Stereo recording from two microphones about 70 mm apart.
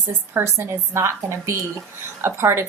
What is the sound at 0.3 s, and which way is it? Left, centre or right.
A woman's voice, right.